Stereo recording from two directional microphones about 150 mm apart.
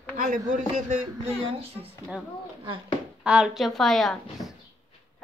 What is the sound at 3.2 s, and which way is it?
A woman's voice, 5° right (ahead or behind).